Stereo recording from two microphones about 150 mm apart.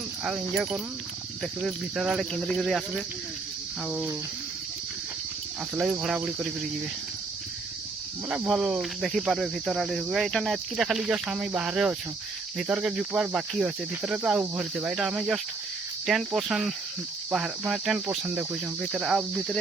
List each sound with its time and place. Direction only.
0.3 s cricket: 5° right (ahead or behind)
3.8 s speech: 5° right (ahead or behind)
5.7 s cricket: centre (ahead or behind)
8.3 s cricket: centre (ahead or behind)